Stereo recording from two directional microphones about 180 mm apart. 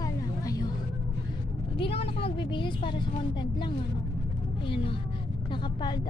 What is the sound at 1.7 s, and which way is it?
A woman's voice, 30° left (ahead or behind).